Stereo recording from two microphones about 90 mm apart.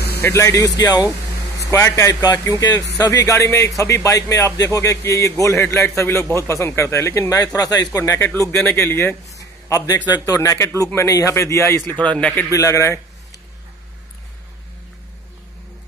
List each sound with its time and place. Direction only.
0.2 s a man's voice: 35° left (ahead or behind)
1.6 s a man's voice: 30° left (ahead or behind)
7.3 s a man's voice: 40° left (ahead or behind); by 9.1 s 25° left (ahead or behind)
9.4 s a man's voice: 35° left (ahead or behind)
11.9 s speech: 15° left (ahead or behind)
12.5 s a man's voice: 35° left (ahead or behind)